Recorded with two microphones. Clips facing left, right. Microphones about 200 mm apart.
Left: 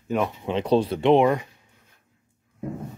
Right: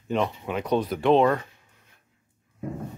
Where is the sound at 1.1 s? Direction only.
15° left (ahead or behind).